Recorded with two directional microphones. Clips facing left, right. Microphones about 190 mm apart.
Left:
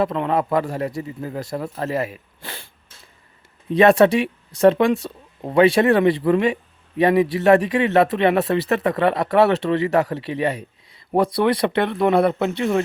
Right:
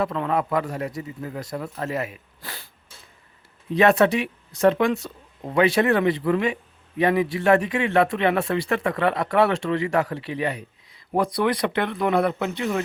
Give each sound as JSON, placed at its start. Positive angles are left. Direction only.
{"t": 0.0, "sound": "speech", "side_deg": 25}
{"t": 3.9, "sound": "speech", "side_deg": 25}